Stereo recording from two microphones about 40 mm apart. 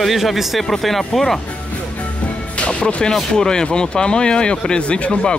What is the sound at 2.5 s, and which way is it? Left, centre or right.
Music, left.